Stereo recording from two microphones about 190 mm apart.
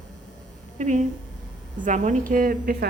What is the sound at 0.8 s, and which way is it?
A woman's voice, 40° right (ahead or behind).